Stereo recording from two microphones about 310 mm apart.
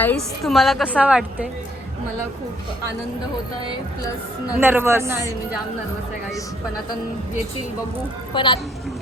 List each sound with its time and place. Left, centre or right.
0.0 s a woman's voice: centre
4.5 s speech: centre
8.3 s a woman's voice: centre